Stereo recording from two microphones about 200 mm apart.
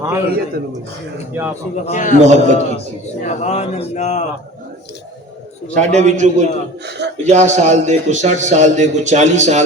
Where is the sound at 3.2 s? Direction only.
35° left (ahead or behind).